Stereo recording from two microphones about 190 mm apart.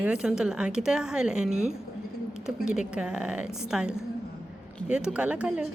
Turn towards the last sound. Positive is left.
turn(degrees=-5)  # may be behind; listen again after turning